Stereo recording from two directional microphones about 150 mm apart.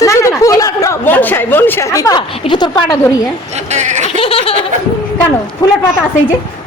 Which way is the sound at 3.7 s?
50° right (ahead or behind).